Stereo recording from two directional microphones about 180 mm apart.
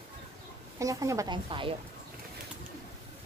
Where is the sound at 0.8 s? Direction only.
20° right (ahead or behind).